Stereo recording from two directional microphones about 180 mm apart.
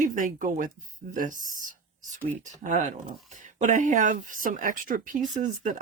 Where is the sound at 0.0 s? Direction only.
45° right (ahead or behind).